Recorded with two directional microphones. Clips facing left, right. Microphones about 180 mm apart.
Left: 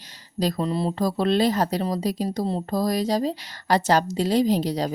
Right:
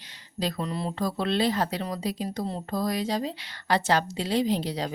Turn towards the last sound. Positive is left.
turn(degrees=40)  # may be behind; listen again after turning